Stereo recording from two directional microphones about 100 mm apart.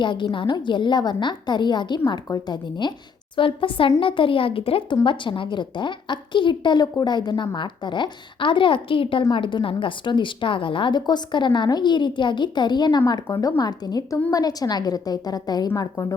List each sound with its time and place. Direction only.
0.0 s a woman's voice: 55° left (ahead or behind)
3.3 s speech: 60° left (ahead or behind)
5.0 s a woman's voice: 55° left (ahead or behind)